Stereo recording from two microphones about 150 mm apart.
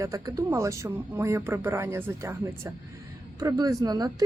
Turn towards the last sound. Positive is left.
turn(degrees=-25)  # may be behind; listen again after turning